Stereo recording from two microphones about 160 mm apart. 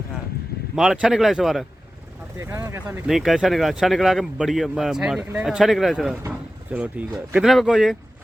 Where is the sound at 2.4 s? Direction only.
15° right (ahead or behind).